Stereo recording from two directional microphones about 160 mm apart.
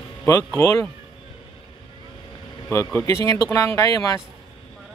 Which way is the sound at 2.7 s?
15° left (ahead or behind).